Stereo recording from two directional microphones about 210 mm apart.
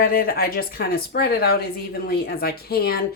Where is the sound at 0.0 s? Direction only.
45° left (ahead or behind).